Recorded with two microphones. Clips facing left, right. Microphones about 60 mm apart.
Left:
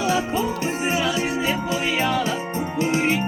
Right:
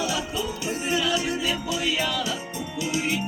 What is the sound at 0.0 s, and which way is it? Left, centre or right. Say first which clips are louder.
Music: left 6 dB; left.